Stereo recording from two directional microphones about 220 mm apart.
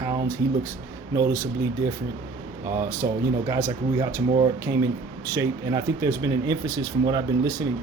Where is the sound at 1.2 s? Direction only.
15° right (ahead or behind).